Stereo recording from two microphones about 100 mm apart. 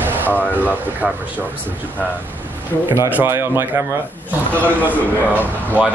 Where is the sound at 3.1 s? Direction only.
25° right (ahead or behind).